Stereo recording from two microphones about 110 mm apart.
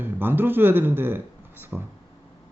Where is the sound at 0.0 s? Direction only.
20° right (ahead or behind).